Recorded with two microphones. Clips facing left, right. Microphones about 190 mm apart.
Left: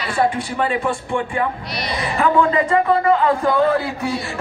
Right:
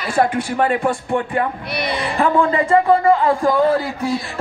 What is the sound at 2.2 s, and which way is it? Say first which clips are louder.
Speech: even; 30° right (ahead or behind).